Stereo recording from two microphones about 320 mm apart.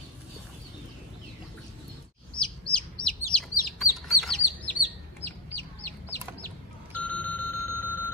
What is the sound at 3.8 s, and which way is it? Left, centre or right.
Bird, centre.